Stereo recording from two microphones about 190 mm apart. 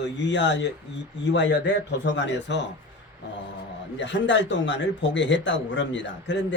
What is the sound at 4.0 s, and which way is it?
A man's voice, 70° left (ahead or behind).